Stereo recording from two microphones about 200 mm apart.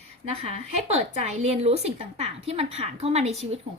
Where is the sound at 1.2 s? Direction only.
35° right (ahead or behind).